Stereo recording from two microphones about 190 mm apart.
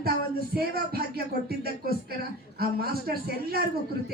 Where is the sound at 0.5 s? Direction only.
55° right (ahead or behind).